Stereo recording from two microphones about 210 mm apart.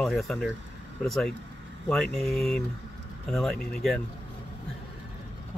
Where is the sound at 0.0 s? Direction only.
Centre (ahead or behind).